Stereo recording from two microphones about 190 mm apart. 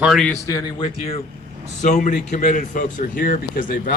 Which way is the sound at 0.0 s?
Centre (ahead or behind).